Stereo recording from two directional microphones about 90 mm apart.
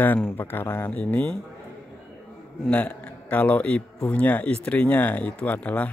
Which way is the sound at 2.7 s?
15° left (ahead or behind).